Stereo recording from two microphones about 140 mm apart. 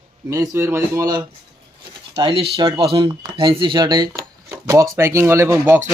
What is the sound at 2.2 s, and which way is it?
A man's voice, 40° right (ahead or behind).